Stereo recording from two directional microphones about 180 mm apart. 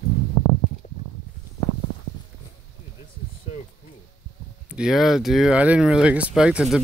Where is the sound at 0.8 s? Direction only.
40° left (ahead or behind).